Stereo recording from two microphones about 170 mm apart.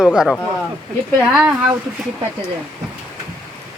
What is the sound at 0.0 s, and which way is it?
Speech, 5° right (ahead or behind).